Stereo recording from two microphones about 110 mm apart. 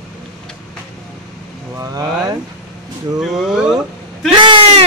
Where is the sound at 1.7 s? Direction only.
35° right (ahead or behind).